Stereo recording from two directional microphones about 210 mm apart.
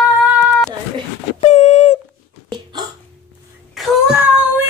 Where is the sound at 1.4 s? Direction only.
35° left (ahead or behind).